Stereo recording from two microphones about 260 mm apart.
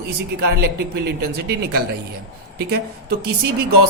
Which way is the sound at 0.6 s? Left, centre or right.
Right.